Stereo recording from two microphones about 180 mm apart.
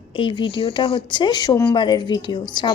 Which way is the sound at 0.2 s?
30° left (ahead or behind).